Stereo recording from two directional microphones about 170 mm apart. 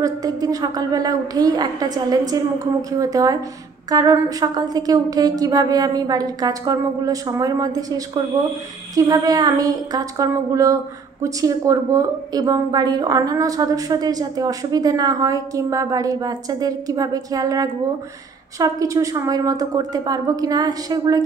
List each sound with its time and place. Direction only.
0.0 s a woman's voice: 20° right (ahead or behind)